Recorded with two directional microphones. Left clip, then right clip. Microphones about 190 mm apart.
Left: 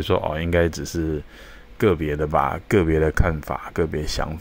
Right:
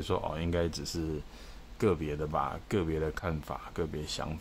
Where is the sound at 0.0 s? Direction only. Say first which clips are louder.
Left 11 dB; 25° left (ahead or behind).